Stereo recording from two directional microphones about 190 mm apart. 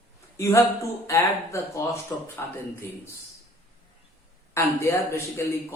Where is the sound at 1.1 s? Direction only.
15° left (ahead or behind).